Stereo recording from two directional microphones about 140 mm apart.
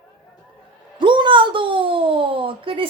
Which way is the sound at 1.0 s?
35° right (ahead or behind).